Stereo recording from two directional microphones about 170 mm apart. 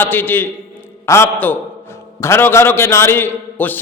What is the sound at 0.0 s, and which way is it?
A man's voice, 10° left (ahead or behind).